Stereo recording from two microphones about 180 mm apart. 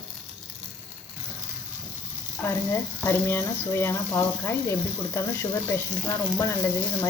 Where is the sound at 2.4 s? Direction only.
10° left (ahead or behind).